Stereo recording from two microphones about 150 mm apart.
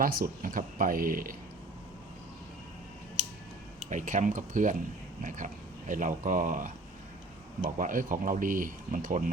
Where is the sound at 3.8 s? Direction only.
55° right (ahead or behind).